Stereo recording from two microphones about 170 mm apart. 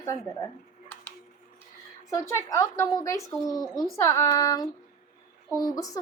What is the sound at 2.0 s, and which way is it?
Speech, 15° left (ahead or behind).